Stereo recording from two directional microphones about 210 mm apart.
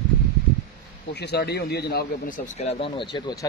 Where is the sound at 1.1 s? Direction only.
50° left (ahead or behind).